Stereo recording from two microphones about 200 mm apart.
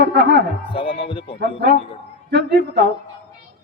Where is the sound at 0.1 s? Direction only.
55° right (ahead or behind).